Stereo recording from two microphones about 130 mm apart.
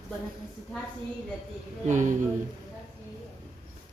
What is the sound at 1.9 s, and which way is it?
Speech, 70° right (ahead or behind).